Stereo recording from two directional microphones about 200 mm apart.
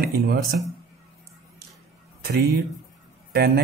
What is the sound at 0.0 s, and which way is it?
Speech, 50° right (ahead or behind).